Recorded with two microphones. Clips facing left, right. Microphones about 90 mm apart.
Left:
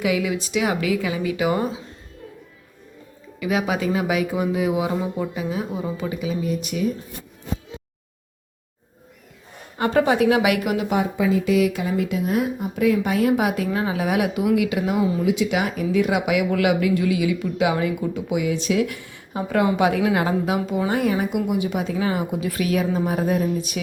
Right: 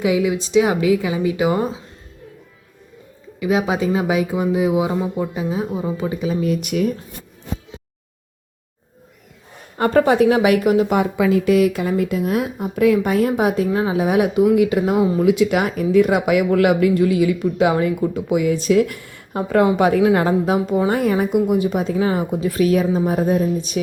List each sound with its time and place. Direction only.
0.0 s a woman's voice: 25° right (ahead or behind)
3.4 s a woman's voice: 25° right (ahead or behind)
6.4 s speech: 70° right (ahead or behind)
9.7 s a woman's voice: 45° right (ahead or behind)
10.8 s a woman's voice: 60° right (ahead or behind); by 15.3 s 40° right (ahead or behind)
15.3 s a woman's voice: 50° right (ahead or behind); by 23.8 s 35° right (ahead or behind)